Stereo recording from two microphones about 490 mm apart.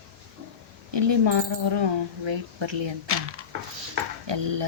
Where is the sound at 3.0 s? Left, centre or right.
Right.